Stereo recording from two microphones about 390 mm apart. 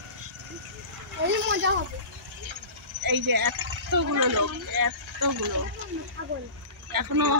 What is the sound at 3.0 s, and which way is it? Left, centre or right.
Speech, right.